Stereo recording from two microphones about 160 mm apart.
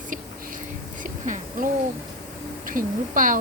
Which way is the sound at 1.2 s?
50° right (ahead or behind).